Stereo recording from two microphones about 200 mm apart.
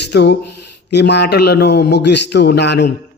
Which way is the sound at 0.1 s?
55° left (ahead or behind).